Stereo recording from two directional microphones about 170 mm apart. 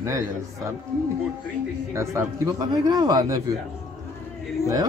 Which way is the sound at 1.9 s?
20° right (ahead or behind).